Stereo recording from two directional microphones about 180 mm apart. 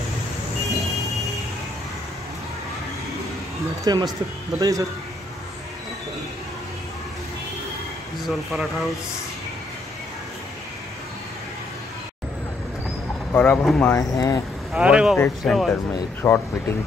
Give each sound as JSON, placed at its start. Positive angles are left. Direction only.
{"t": 3.8, "sound": "speech", "side_deg": -20}
{"t": 8.3, "sound": "speech", "side_deg": 0}
{"t": 13.3, "sound": "speech", "side_deg": 10}
{"t": 14.1, "sound": "speech", "side_deg": 20}
{"t": 14.7, "sound": "speech", "side_deg": -5}
{"t": 15.1, "sound": "speech", "side_deg": 5}
{"t": 16.2, "sound": "speech", "side_deg": 15}